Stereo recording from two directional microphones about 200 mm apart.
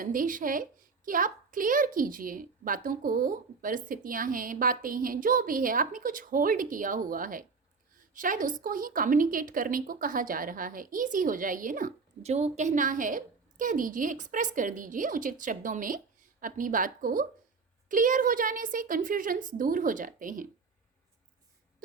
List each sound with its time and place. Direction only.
0.0 s a woman's voice: 45° right (ahead or behind)